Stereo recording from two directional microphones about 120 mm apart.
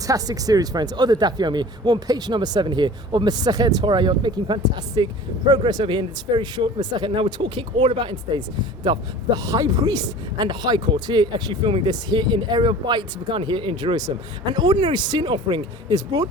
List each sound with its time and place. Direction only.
0.1 s speech: 30° right (ahead or behind)